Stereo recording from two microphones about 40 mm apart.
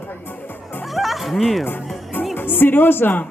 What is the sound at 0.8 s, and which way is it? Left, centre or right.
Music, centre.